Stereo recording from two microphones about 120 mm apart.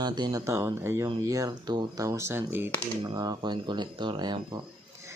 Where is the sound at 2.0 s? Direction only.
25° right (ahead or behind).